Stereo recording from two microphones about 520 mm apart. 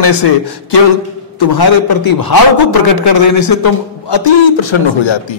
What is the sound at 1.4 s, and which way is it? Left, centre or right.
A man's voice, left.